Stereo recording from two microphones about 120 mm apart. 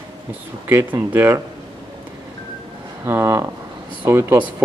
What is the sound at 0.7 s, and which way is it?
Speech, 20° right (ahead or behind).